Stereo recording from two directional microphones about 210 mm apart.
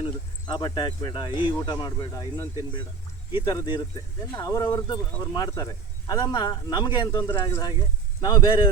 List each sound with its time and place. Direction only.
0.0 s speech: 20° left (ahead or behind)